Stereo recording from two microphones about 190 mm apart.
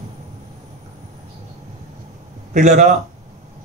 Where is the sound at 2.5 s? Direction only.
40° right (ahead or behind).